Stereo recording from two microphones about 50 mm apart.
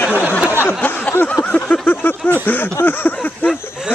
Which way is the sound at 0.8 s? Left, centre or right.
Left.